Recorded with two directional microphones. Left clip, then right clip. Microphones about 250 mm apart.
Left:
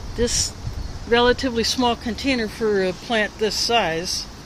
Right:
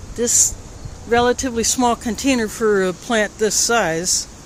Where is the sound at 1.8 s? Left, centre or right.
Right.